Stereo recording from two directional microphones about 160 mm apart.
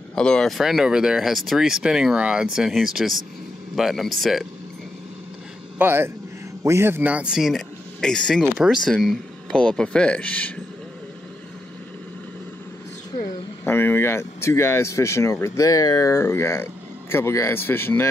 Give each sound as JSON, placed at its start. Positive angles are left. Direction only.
{"t": 0.1, "sound": "speech", "side_deg": 5}
{"t": 5.8, "sound": "a man's voice", "side_deg": -15}
{"t": 13.7, "sound": "speech", "side_deg": 15}